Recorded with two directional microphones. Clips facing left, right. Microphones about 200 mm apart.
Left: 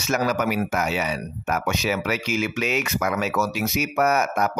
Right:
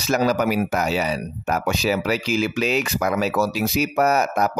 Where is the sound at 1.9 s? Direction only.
35° right (ahead or behind).